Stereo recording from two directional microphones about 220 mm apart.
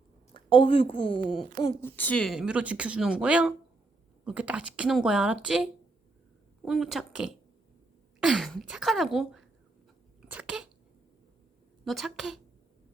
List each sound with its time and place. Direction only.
0.3 s a woman's voice: 25° left (ahead or behind)
1.8 s speech: 5° left (ahead or behind)
6.7 s speech: centre (ahead or behind)
10.2 s cough: 5° right (ahead or behind)
11.9 s speech: centre (ahead or behind)